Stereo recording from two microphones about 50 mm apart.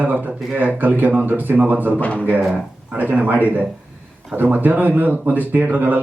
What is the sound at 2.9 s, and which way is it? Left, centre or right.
Speech, right.